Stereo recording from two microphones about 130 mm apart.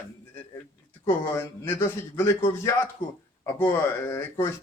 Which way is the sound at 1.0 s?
20° left (ahead or behind).